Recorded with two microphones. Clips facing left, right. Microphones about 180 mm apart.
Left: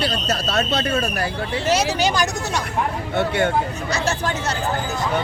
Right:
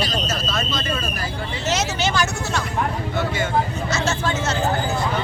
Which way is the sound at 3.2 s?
65° left (ahead or behind).